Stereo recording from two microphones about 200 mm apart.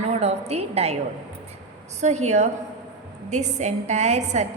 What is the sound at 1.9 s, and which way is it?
A woman's voice, 35° right (ahead or behind).